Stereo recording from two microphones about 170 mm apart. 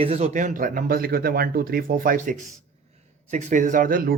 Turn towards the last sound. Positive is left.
turn(degrees=-55)  # may be behind; listen again after turning